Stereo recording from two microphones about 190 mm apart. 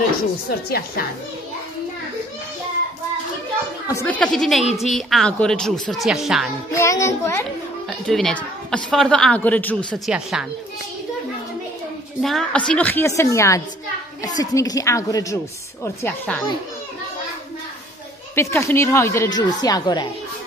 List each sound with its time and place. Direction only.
0.5 s a woman's voice: 55° left (ahead or behind)
3.8 s a woman's voice: 15° left (ahead or behind)
4.2 s a woman's voice: centre (ahead or behind)
6.7 s a woman's voice: 15° left (ahead or behind)
8.1 s a woman's voice: 5° left (ahead or behind)
12.2 s a woman's voice: centre (ahead or behind)
18.3 s a woman's voice: 15° left (ahead or behind)